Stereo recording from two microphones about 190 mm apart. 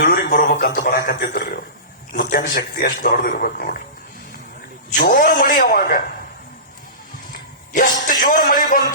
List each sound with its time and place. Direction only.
0.0 s a man's voice: 50° left (ahead or behind)
4.9 s a man's voice: 50° left (ahead or behind)
7.3 s a man's voice: 50° left (ahead or behind)